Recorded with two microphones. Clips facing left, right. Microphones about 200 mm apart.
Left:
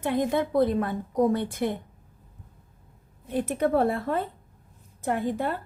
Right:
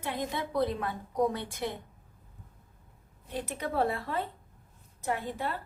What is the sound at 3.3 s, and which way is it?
Speech, 50° left (ahead or behind).